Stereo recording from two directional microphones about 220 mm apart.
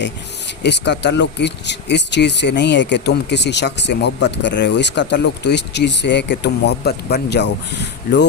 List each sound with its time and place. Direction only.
0.6 s speech: 50° left (ahead or behind)